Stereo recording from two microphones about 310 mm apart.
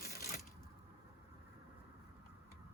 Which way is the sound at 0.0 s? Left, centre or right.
Left.